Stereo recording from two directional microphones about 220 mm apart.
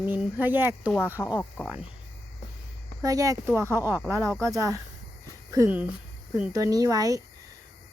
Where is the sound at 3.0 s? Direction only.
15° right (ahead or behind).